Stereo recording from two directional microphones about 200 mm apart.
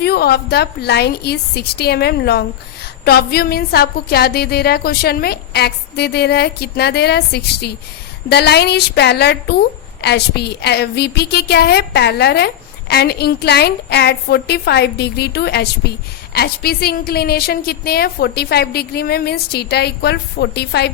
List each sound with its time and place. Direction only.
0.0 s a woman's voice: 50° left (ahead or behind)